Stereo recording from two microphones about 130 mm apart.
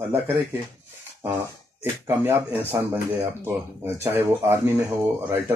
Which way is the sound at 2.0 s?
20° right (ahead or behind).